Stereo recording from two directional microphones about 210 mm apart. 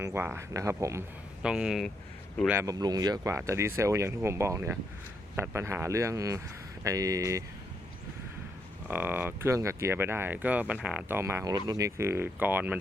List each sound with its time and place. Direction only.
0.0 s speech: 10° right (ahead or behind)
2.5 s speech: 15° right (ahead or behind)
8.9 s speech: 10° right (ahead or behind)